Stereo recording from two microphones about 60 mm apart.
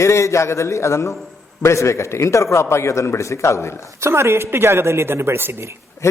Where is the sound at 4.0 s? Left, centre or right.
Right.